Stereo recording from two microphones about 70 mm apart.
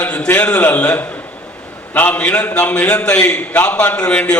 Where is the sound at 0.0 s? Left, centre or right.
Centre.